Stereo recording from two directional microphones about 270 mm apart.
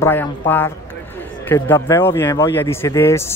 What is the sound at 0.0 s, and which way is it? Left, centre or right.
Speech, centre.